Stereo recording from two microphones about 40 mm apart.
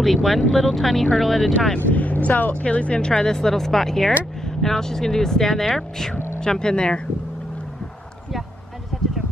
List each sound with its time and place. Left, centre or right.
0.0 s speech: centre
1.9 s speech: left
2.6 s speech: left
3.0 s speech: centre
6.1 s vehicle: left
6.4 s speech: centre
8.9 s a sound: centre